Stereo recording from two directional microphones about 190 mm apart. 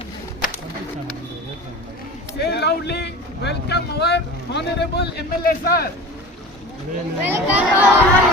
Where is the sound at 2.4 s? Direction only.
60° left (ahead or behind).